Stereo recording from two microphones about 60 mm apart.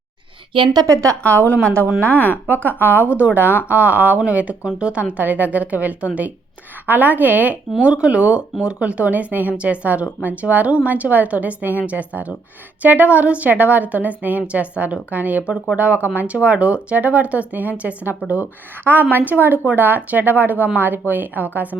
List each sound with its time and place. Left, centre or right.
0.7 s a woman's voice: right
2.0 s speech: left
2.5 s a woman's voice: right
19.1 s a woman's voice: right